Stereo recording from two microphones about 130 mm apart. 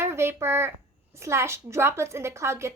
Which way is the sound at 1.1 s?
20° right (ahead or behind).